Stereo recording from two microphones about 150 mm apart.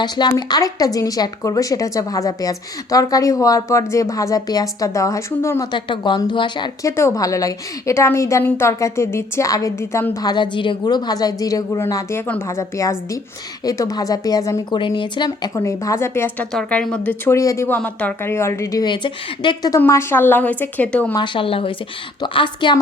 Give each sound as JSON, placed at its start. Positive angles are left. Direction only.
{"t": 0.0, "sound": "a woman's voice", "side_deg": 30}
{"t": 5.7, "sound": "speech", "side_deg": 30}
{"t": 6.9, "sound": "a woman's voice", "side_deg": 20}
{"t": 19.7, "sound": "speech", "side_deg": 20}
{"t": 21.2, "sound": "speech", "side_deg": 35}